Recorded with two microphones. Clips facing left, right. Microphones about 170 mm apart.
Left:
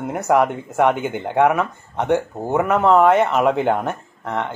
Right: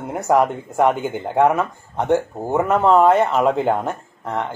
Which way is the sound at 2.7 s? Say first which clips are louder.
Even; 15° right (ahead or behind).